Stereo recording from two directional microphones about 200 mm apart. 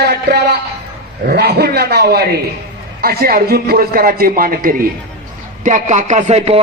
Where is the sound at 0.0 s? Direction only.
55° right (ahead or behind).